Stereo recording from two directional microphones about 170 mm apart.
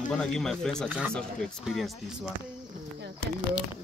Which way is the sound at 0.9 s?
10° right (ahead or behind).